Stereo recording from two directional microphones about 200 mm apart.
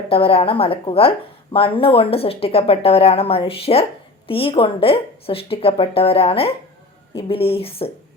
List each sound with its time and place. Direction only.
0.1 s a woman's voice: 30° left (ahead or behind)